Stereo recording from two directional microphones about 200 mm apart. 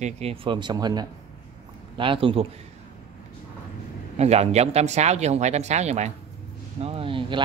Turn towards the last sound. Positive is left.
turn(degrees=-25)  # may be behind; listen again after turning